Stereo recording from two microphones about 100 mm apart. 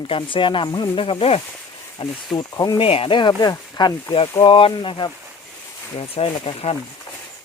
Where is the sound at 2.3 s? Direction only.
40° left (ahead or behind).